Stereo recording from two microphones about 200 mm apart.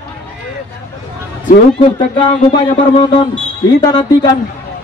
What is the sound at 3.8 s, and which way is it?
Speech, 20° left (ahead or behind).